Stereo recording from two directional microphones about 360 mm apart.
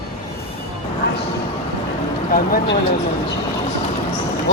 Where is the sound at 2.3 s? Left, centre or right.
Left.